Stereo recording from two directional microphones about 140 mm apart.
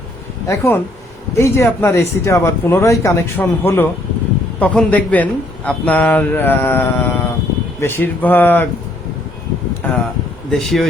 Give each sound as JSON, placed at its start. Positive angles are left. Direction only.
{"t": 0.4, "sound": "a man's voice", "side_deg": 15}
{"t": 9.8, "sound": "a man's voice", "side_deg": 10}
{"t": 10.5, "sound": "speech", "side_deg": 0}